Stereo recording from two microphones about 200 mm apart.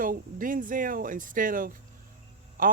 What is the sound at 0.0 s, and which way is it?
Speech, 45° right (ahead or behind).